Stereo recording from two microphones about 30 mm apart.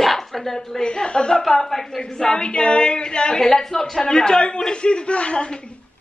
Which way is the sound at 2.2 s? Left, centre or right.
Left.